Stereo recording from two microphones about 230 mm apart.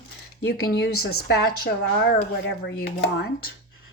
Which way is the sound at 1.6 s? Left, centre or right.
Left.